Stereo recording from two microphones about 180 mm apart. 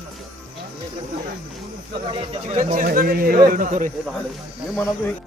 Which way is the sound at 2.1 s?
30° right (ahead or behind).